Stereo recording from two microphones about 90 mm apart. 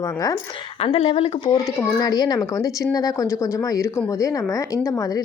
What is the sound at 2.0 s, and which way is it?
A woman's voice, 45° left (ahead or behind).